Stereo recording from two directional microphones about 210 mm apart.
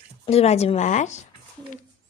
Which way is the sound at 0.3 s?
30° left (ahead or behind).